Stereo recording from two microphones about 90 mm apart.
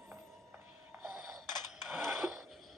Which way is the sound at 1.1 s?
5° right (ahead or behind).